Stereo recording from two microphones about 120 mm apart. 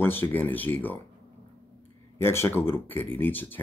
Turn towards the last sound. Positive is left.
turn(degrees=15)  # may be behind; listen again after turning